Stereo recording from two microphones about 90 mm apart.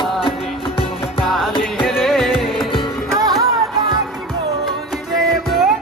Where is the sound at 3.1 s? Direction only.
45° right (ahead or behind).